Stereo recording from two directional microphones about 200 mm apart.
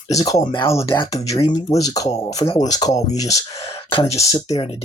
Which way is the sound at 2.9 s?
35° left (ahead or behind).